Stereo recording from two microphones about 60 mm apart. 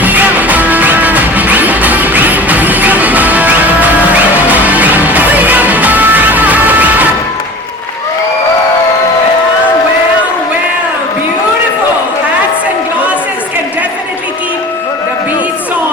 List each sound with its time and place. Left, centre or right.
0.0 s music: right